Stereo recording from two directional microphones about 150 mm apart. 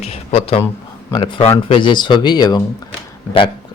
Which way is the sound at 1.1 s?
35° left (ahead or behind).